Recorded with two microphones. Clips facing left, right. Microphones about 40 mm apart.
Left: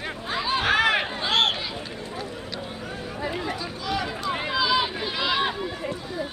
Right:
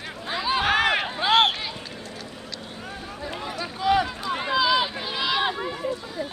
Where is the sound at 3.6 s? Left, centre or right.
Right.